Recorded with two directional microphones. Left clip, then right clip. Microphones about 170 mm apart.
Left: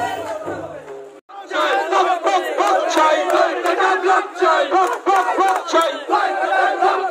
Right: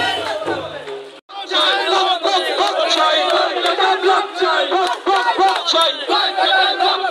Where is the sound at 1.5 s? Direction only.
80° left.